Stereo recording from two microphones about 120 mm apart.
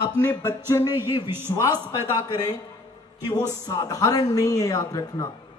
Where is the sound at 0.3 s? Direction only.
30° left (ahead or behind).